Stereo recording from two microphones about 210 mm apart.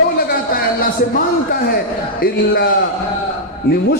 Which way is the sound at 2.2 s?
45° left (ahead or behind).